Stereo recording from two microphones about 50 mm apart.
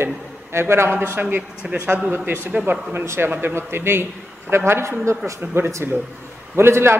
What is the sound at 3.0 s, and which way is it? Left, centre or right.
A man's voice, right.